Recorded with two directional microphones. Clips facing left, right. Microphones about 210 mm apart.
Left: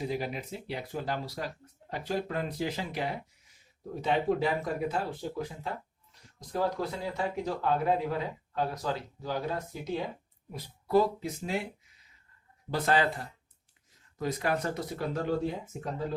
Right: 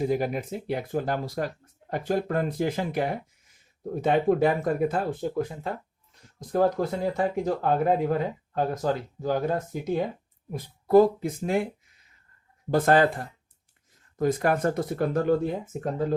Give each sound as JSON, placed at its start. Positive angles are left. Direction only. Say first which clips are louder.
{"t": 0.0, "sound": "speech", "louder": "right 8 dB", "side_deg": -50}
{"t": 6.5, "sound": "speech", "louder": "right 7 dB", "side_deg": -50}
{"t": 12.7, "sound": "speech", "louder": "right 7 dB", "side_deg": -50}